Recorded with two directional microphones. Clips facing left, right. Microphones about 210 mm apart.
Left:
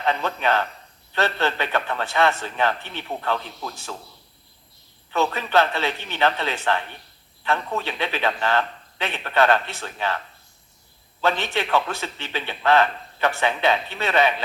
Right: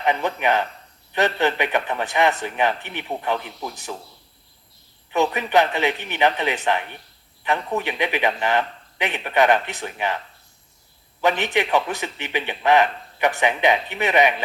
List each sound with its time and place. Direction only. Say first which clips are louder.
0.0 s a man's voice: right 2 dB; 15° right (ahead or behind)
5.1 s a man's voice: right 2 dB; 15° right (ahead or behind)
11.2 s a man's voice: right 3 dB; 15° right (ahead or behind)